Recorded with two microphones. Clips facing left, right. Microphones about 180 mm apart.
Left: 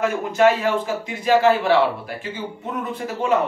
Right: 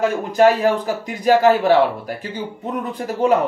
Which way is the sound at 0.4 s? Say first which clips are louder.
Right 3 dB; 40° right (ahead or behind).